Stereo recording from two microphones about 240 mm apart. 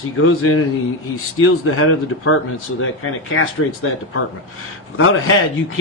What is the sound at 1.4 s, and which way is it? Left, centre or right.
Speech, left.